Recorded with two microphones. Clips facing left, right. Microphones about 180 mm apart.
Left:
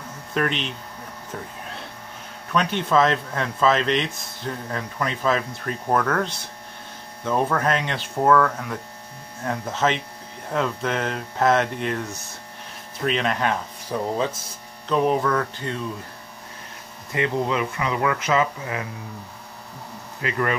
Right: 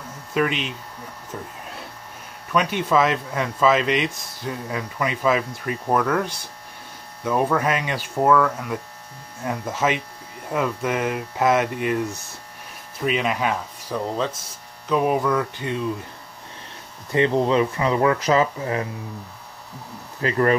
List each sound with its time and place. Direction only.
0.3 s speech: 5° right (ahead or behind)
2.5 s speech: 10° right (ahead or behind)
13.9 s speech: 5° left (ahead or behind)
14.9 s speech: 10° right (ahead or behind)
17.1 s speech: 30° right (ahead or behind)
20.2 s speech: 35° right (ahead or behind)